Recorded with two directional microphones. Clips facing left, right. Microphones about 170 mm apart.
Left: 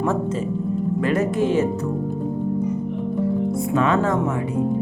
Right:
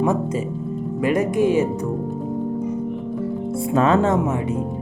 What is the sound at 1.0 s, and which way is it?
Music, 15° right (ahead or behind).